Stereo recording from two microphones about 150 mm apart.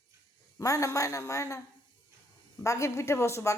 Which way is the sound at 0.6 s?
20° left (ahead or behind).